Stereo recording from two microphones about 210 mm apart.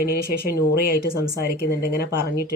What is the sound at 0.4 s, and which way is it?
Speech, 45° left (ahead or behind).